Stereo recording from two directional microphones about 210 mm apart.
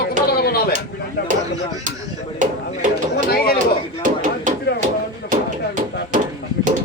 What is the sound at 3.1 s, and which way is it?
Speech, 45° left (ahead or behind).